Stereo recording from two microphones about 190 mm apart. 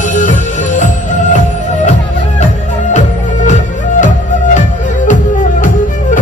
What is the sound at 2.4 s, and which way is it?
Music, 40° left (ahead or behind).